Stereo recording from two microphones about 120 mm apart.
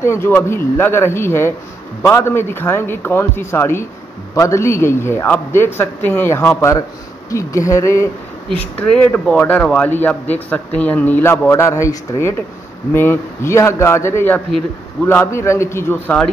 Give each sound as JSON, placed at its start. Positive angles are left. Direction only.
{"t": 0.0, "sound": "a man's voice", "side_deg": 20}
{"t": 8.5, "sound": "a man's voice", "side_deg": 10}